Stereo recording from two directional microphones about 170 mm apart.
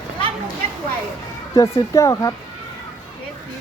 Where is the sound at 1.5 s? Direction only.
20° left (ahead or behind).